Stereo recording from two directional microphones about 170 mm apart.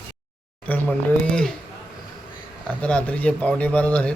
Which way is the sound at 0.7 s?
5° left (ahead or behind).